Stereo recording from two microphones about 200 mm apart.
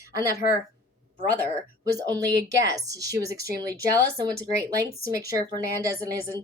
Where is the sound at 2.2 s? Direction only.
15° right (ahead or behind).